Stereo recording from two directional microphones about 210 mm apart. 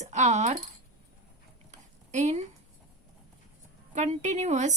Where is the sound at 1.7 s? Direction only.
35° right (ahead or behind).